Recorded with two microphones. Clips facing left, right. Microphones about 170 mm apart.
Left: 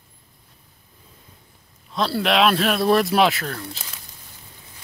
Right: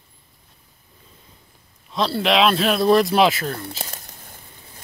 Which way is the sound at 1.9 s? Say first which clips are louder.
Right 1 dB; centre (ahead or behind).